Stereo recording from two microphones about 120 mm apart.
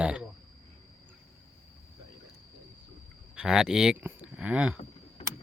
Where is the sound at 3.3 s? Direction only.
5° right (ahead or behind).